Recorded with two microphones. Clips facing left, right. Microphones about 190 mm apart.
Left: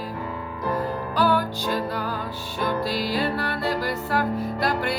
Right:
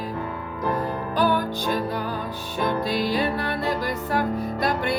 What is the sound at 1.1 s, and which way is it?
Music, 20° right (ahead or behind).